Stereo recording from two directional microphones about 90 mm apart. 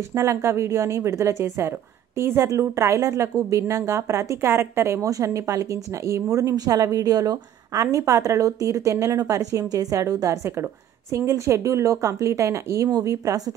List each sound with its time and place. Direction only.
0.1 s speech: 30° right (ahead or behind)